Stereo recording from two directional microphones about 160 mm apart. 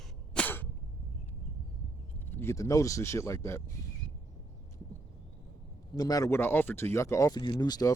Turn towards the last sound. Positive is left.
turn(degrees=25)  # may be behind; listen again after turning